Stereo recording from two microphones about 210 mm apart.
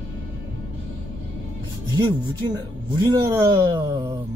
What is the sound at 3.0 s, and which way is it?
Speech, 20° right (ahead or behind).